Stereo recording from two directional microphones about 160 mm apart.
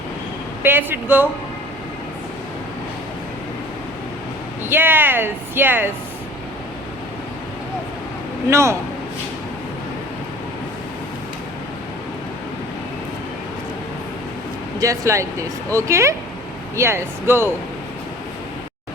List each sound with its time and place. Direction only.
0.6 s speech: 15° right (ahead or behind)
4.6 s speech: 15° right (ahead or behind)
8.4 s speech: 15° right (ahead or behind)
14.8 s speech: 20° right (ahead or behind)